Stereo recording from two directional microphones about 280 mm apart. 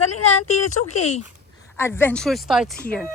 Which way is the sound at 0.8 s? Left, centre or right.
Left.